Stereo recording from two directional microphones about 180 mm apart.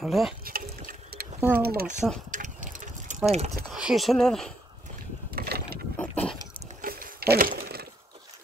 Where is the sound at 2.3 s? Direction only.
45° right (ahead or behind).